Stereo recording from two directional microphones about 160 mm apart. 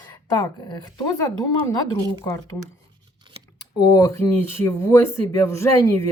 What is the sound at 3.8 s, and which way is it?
Speech, 20° left (ahead or behind).